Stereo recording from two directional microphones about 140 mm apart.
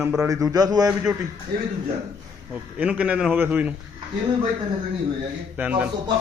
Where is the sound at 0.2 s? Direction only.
25° right (ahead or behind).